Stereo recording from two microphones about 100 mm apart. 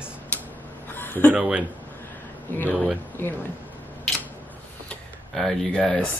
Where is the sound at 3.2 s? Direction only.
25° left (ahead or behind).